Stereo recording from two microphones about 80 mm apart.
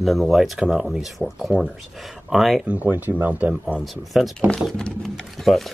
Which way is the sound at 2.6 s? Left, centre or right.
Centre.